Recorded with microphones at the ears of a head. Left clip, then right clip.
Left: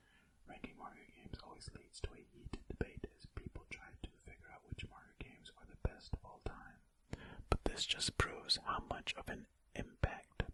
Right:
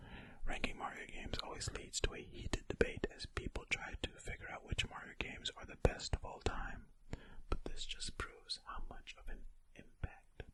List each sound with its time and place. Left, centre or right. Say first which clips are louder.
0.4 s whispering: right 10 dB; right
7.5 s speech: left 8 dB; left